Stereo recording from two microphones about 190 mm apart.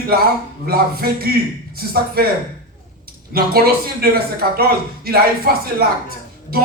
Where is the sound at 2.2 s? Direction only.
55° right (ahead or behind).